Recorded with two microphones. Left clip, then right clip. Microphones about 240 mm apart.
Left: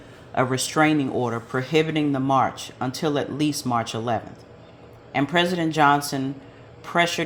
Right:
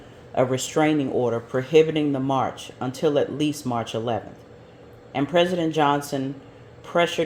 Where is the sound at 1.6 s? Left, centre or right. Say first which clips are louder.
Right 5 dB; left.